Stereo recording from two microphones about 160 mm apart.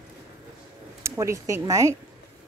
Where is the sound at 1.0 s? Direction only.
20° right (ahead or behind).